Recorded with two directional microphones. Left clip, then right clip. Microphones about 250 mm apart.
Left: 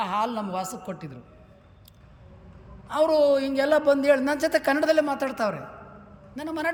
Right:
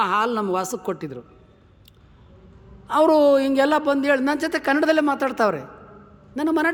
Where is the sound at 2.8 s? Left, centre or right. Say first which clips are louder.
Right 4 dB; centre.